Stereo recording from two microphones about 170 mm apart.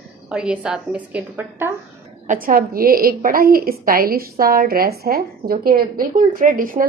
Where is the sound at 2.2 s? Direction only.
50° right (ahead or behind).